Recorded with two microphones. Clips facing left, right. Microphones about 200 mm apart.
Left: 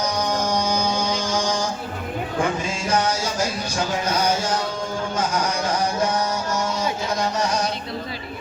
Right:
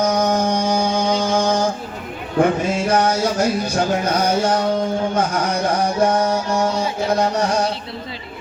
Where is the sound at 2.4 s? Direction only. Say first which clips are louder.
Right 9 dB; 60° right (ahead or behind).